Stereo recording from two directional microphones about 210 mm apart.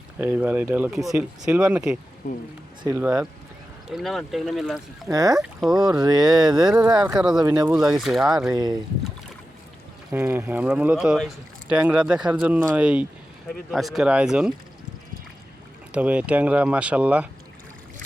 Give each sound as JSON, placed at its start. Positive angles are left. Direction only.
{"t": 0.2, "sound": "speech", "side_deg": -10}
{"t": 5.1, "sound": "speech", "side_deg": -15}
{"t": 5.4, "sound": "speech", "side_deg": 0}
{"t": 5.7, "sound": "speech", "side_deg": -20}
{"t": 7.2, "sound": "speech", "side_deg": -5}
{"t": 7.4, "sound": "speech", "side_deg": -20}
{"t": 7.9, "sound": "speech", "side_deg": 0}
{"t": 8.5, "sound": "speech", "side_deg": -20}
{"t": 10.1, "sound": "speech", "side_deg": -10}
{"t": 15.9, "sound": "speech", "side_deg": -5}